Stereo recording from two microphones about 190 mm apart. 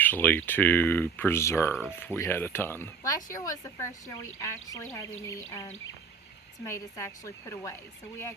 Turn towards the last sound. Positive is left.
turn(degrees=15)  # may be behind; listen again after turning